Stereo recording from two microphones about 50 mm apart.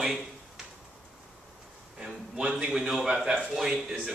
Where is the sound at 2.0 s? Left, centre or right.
Centre.